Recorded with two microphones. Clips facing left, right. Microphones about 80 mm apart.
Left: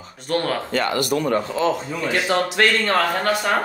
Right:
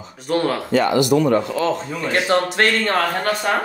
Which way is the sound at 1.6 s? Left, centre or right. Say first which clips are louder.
Even; left.